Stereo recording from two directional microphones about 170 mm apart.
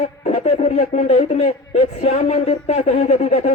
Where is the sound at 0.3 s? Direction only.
40° left (ahead or behind).